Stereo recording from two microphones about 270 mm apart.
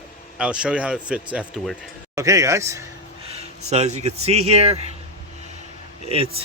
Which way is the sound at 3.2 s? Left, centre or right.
Right.